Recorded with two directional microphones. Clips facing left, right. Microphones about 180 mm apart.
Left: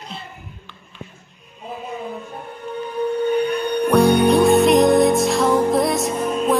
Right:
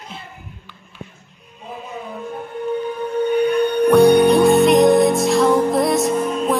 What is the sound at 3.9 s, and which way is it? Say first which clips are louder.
Music: right 3 dB; centre (ahead or behind).